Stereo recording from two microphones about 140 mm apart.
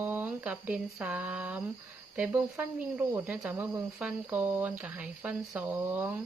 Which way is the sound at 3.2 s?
10° right (ahead or behind).